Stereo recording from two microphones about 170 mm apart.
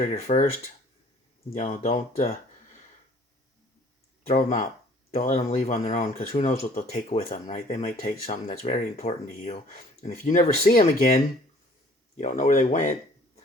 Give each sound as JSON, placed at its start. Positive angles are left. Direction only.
{"t": 0.0, "sound": "speech", "side_deg": 50}
{"t": 1.5, "sound": "speech", "side_deg": 45}
{"t": 4.3, "sound": "speech", "side_deg": 45}
{"t": 8.6, "sound": "speech", "side_deg": 40}